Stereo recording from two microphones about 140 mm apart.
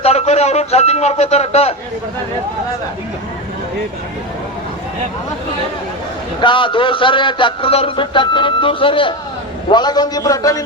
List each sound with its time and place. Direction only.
0.0 s a man's voice: 45° left (ahead or behind)
6.4 s a man's voice: 35° left (ahead or behind)